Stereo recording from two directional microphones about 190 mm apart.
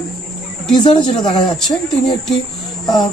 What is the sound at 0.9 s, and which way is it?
Speech, 25° left (ahead or behind).